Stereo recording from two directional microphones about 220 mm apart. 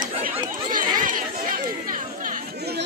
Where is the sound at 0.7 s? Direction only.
40° right (ahead or behind).